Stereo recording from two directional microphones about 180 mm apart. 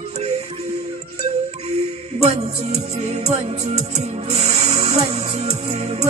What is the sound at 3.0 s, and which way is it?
Music, 40° right (ahead or behind).